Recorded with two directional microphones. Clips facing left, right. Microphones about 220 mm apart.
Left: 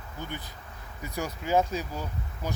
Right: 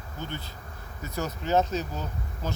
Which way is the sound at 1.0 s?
15° left (ahead or behind).